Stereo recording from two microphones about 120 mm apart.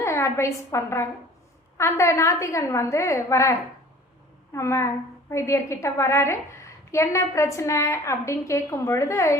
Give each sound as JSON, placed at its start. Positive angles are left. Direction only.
{"t": 0.0, "sound": "a woman's voice", "side_deg": 25}